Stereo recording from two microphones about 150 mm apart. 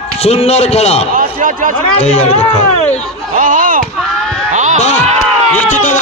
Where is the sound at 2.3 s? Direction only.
50° left (ahead or behind).